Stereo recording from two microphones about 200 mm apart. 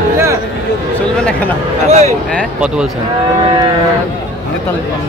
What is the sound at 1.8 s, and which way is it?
Speech, 35° right (ahead or behind).